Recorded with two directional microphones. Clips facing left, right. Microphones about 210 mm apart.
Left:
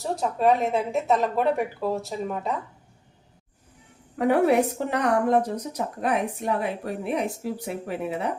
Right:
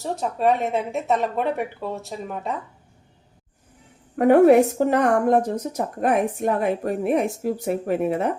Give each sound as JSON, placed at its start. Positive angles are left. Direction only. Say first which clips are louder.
{"t": 0.0, "sound": "a woman's voice", "louder": "right 1 dB", "side_deg": 0}
{"t": 4.2, "sound": "a woman's voice", "louder": "right 6 dB", "side_deg": -50}